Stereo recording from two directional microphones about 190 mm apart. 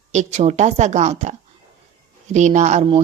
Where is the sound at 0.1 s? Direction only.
35° right (ahead or behind).